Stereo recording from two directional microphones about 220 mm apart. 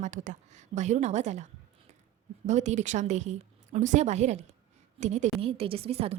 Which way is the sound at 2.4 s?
30° right (ahead or behind).